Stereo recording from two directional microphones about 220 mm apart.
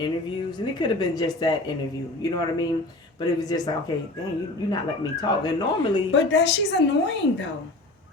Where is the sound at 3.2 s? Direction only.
15° left (ahead or behind).